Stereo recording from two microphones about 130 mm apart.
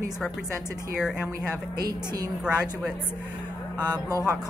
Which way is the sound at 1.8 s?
30° right (ahead or behind).